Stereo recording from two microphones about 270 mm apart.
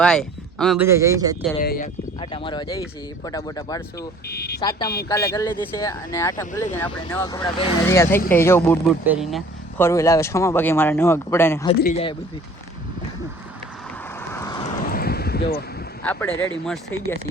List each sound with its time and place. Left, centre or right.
0.0 s speech: centre
0.9 s speech: centre
1.6 s speech: left
2.3 s speech: centre
4.3 s speech: left
4.6 s speech: centre
11.8 s speech: left
14.3 s vehicle: centre
14.8 s a sound: left
16.0 s speech: centre